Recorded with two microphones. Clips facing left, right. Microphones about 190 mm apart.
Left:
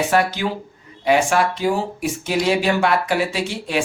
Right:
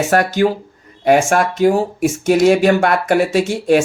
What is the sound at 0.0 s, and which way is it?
Speech, 45° right (ahead or behind).